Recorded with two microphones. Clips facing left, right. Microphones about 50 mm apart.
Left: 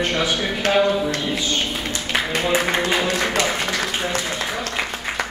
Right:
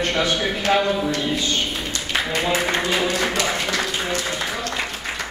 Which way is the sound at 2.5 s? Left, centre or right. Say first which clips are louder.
Left 3 dB; left.